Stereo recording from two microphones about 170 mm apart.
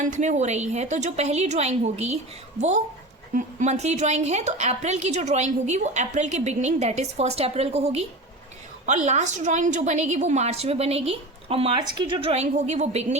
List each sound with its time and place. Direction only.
0.0 s a woman's voice: 45° right (ahead or behind)